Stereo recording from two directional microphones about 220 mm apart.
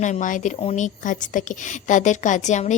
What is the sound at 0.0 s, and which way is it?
Speech, 35° left (ahead or behind).